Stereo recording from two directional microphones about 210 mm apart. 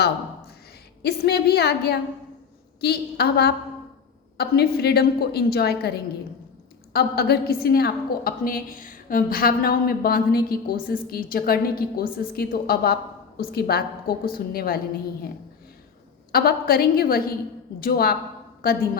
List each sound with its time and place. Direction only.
1.0 s a woman's voice: 50° left (ahead or behind)
16.3 s a woman's voice: 45° left (ahead or behind)